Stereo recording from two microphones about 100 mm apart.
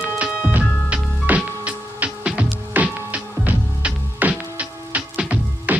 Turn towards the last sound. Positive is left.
turn(degrees=-10)  # may be behind; listen again after turning